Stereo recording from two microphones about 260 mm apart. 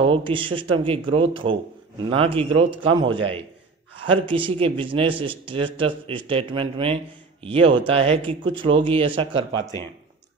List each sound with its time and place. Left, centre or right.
0.0 s speech: centre